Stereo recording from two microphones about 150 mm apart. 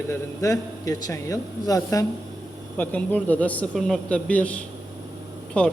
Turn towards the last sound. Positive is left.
turn(degrees=10)  # may be behind; listen again after turning